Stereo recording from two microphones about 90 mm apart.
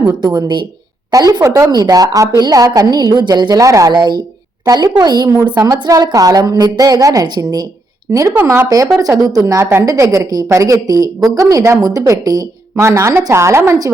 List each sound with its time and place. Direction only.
0.2 s a woman's voice: 40° right (ahead or behind)
0.4 s speech: 55° right (ahead or behind)
1.1 s a woman's voice: 40° right (ahead or behind)
1.7 s a woman's voice: 45° right (ahead or behind)
3.6 s a woman's voice: 40° right (ahead or behind)
3.9 s speech: 55° right (ahead or behind)
4.6 s a woman's voice: 45° right (ahead or behind)